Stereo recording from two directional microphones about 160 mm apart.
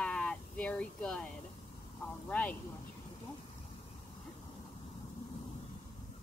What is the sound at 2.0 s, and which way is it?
Speech, 10° left (ahead or behind).